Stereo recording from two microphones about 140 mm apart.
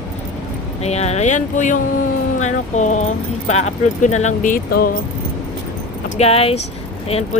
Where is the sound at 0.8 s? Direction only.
50° left (ahead or behind); by 4.9 s 90° left.